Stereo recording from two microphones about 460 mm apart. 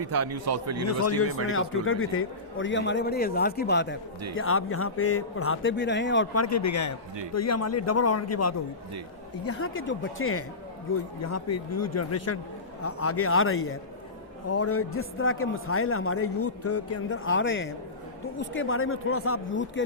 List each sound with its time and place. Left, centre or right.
0.0 s a man's voice: right
0.9 s speech: left